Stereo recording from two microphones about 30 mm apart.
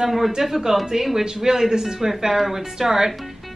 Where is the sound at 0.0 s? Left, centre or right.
Centre.